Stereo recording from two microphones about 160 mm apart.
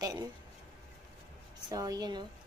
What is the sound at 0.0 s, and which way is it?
Speech, 25° right (ahead or behind).